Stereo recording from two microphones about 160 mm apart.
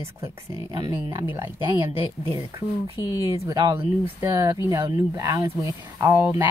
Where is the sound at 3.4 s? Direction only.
20° right (ahead or behind).